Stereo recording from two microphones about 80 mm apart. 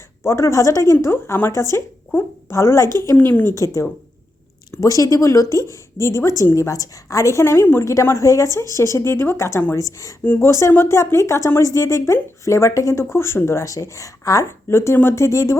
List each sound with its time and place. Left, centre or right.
0.2 s speech: left
1.0 s speech: left
3.5 s a woman's voice: left
10.2 s speech: left